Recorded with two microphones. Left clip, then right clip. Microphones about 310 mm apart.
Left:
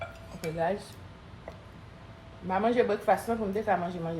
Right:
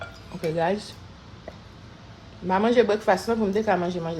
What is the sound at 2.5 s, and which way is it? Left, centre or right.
Speech, right.